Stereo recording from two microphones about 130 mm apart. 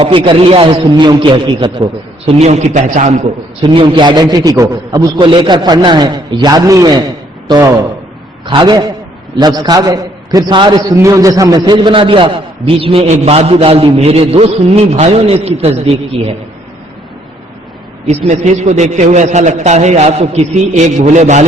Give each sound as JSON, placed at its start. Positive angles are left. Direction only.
{"t": 0.0, "sound": "a man's voice", "side_deg": -45}
{"t": 3.6, "sound": "a man's voice", "side_deg": -35}
{"t": 5.1, "sound": "a man's voice", "side_deg": -35}
{"t": 8.4, "sound": "a man's voice", "side_deg": -35}
{"t": 10.9, "sound": "a man's voice", "side_deg": -25}
{"t": 18.0, "sound": "a man's voice", "side_deg": -50}